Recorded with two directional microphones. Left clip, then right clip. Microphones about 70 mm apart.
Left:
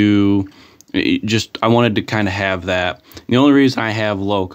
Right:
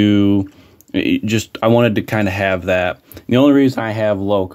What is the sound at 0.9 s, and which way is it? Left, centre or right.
Speech, centre.